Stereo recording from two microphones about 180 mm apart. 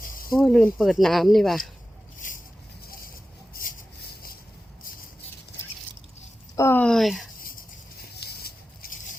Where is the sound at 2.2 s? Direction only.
45° left (ahead or behind).